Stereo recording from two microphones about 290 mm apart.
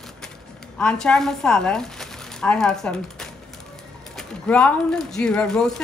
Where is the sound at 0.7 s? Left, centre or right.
Centre.